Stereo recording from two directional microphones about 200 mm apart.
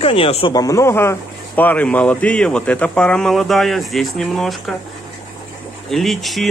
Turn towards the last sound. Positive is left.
turn(degrees=0)  # may be behind; listen again after turning